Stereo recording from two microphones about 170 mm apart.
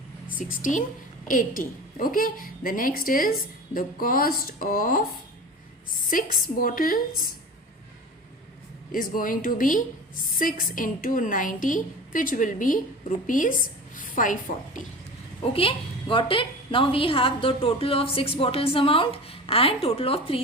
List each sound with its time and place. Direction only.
0.3 s a woman's voice: 55° left (ahead or behind)
6.1 s a woman's voice: 55° left (ahead or behind)
8.9 s a woman's voice: 55° left (ahead or behind)
15.5 s a woman's voice: 30° left (ahead or behind)